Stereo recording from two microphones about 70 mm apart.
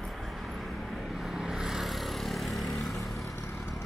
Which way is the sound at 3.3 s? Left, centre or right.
Left.